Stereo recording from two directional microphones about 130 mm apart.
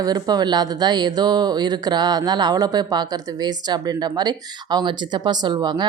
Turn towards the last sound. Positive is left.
turn(degrees=-35)  # may be behind; listen again after turning